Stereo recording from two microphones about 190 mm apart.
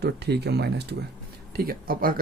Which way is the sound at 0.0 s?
60° right (ahead or behind).